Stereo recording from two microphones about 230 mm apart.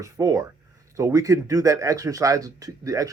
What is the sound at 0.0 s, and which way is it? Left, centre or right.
Speech, centre.